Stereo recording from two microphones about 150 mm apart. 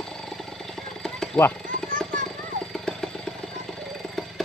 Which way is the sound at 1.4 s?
15° left (ahead or behind).